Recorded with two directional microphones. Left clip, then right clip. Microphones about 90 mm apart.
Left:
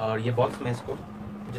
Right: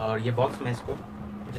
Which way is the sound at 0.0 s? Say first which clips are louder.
Left 1 dB; 20° right (ahead or behind).